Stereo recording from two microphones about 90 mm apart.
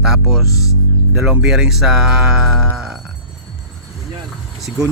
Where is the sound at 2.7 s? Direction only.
5° right (ahead or behind).